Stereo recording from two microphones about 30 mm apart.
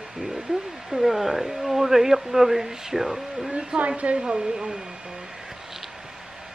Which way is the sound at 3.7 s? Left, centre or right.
Right.